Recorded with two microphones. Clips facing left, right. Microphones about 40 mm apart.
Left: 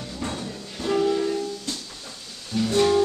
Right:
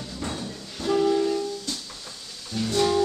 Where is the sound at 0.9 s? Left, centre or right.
Centre.